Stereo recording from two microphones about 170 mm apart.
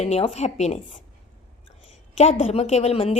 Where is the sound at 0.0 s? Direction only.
40° left (ahead or behind).